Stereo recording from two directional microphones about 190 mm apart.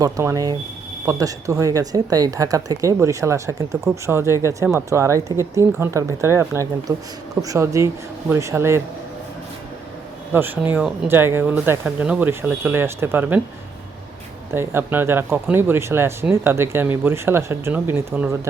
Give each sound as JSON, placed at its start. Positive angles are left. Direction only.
{"t": 0.0, "sound": "speech", "side_deg": -15}
{"t": 10.3, "sound": "speech", "side_deg": -10}
{"t": 14.5, "sound": "speech", "side_deg": -10}